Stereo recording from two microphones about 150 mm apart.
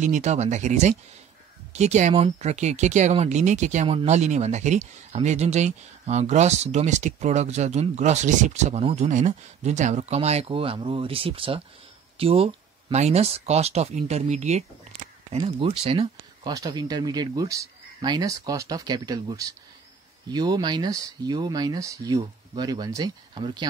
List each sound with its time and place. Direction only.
0.0 s speech: 50° right (ahead or behind)
15.3 s speech: 40° right (ahead or behind)
16.5 s speech: 25° right (ahead or behind)